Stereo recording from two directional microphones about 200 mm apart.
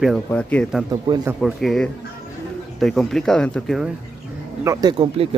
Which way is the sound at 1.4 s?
Centre (ahead or behind).